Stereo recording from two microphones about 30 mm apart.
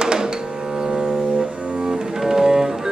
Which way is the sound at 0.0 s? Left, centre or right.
Right.